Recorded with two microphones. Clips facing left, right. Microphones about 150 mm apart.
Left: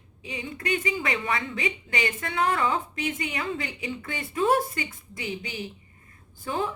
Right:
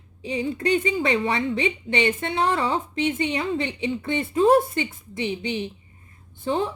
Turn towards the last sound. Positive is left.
turn(degrees=-25)  # may be behind; listen again after turning